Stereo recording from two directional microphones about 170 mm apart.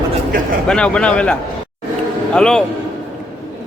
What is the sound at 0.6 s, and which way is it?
Speech, 5° left (ahead or behind).